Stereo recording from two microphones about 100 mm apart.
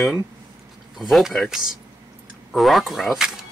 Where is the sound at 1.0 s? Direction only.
Centre (ahead or behind).